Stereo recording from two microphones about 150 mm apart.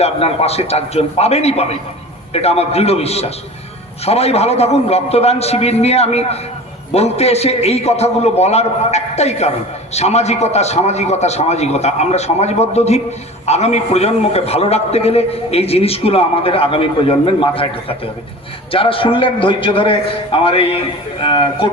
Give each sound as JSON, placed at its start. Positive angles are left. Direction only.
{"t": 0.0, "sound": "a man's voice", "side_deg": 40}